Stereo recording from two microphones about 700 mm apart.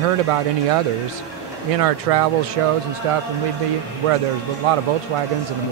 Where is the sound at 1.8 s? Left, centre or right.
Right.